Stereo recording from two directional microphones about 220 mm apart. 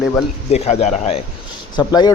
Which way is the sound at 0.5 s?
30° left (ahead or behind).